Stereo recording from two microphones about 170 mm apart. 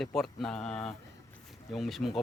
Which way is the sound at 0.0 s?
Centre (ahead or behind).